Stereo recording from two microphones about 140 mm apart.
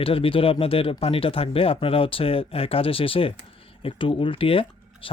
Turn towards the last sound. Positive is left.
turn(degrees=40)  # may be behind; listen again after turning